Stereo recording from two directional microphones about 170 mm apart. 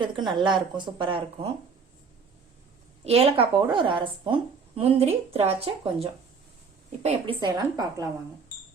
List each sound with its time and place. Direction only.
0.3 s speech: 25° right (ahead or behind)
3.0 s speech: 35° right (ahead or behind)
7.4 s speech: 20° right (ahead or behind)